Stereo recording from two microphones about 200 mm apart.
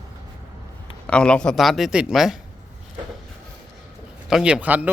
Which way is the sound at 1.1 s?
5° left (ahead or behind).